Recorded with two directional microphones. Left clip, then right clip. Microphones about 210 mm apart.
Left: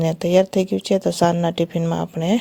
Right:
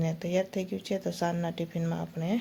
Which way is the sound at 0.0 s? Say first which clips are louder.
Left 13 dB; 40° left (ahead or behind).